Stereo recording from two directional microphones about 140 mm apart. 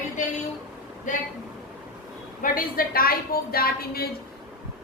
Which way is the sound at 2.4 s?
90° left.